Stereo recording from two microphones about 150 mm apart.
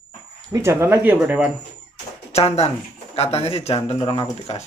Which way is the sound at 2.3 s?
45° left (ahead or behind).